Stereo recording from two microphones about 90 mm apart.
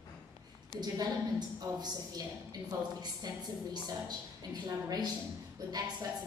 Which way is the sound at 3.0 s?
50° right (ahead or behind).